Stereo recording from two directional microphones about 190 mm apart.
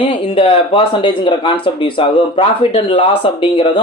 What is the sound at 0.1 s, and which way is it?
Speech, 30° left (ahead or behind).